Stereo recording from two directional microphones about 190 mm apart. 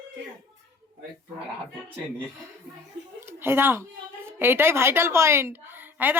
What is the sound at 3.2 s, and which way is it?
Speech, 10° right (ahead or behind).